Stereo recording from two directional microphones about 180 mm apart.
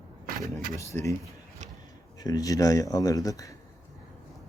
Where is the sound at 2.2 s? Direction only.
20° left (ahead or behind).